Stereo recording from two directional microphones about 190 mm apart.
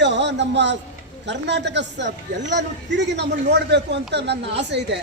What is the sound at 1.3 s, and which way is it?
Speech, 65° right (ahead or behind).